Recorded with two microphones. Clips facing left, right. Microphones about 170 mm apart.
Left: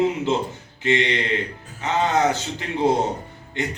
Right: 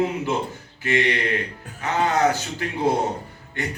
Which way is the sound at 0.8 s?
20° left (ahead or behind).